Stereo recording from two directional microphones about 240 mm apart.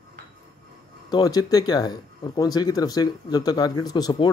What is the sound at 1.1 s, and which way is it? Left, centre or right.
Speech, centre.